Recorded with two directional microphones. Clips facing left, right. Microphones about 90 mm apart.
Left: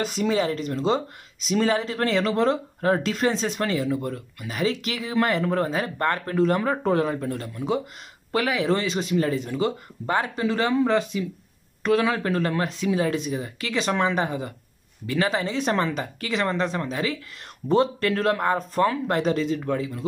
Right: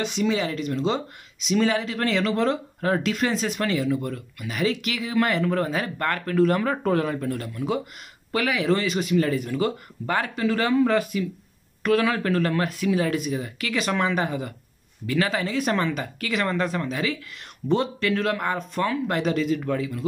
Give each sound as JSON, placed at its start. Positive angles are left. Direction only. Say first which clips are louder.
{"t": 0.0, "sound": "speech", "louder": "left 1 dB", "side_deg": 40}